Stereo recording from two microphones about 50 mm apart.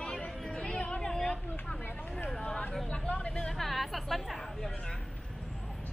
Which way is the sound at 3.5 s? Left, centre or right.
Centre.